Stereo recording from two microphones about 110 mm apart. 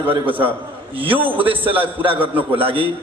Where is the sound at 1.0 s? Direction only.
55° right (ahead or behind).